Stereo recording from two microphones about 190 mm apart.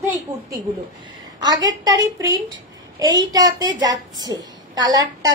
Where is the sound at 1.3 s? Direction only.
20° right (ahead or behind).